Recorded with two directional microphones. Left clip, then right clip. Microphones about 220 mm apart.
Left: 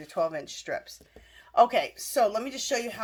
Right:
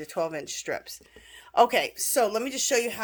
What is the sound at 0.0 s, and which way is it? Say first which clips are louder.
Speech: left 1 dB; 35° right (ahead or behind).